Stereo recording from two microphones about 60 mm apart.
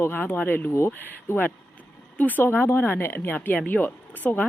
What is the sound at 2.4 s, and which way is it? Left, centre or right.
Speech, left.